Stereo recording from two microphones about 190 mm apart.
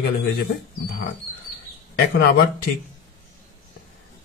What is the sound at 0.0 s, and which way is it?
Speech, 55° left (ahead or behind).